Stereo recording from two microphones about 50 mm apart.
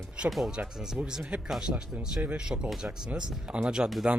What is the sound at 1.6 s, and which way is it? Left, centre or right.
Speech, centre.